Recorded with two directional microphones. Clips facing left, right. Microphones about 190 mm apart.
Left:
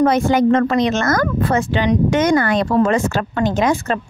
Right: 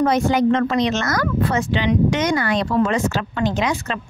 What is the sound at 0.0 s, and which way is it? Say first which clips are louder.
Speech: left 3 dB; 50° left (ahead or behind).